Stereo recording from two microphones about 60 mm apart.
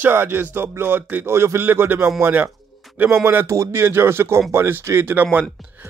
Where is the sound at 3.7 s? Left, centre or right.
Right.